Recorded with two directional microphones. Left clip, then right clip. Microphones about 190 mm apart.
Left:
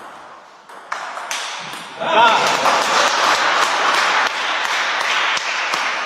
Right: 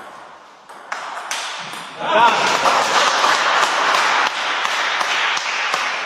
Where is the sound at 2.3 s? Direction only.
Centre (ahead or behind).